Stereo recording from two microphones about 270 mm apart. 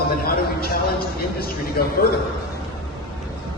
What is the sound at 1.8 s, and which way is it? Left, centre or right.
Speech, left.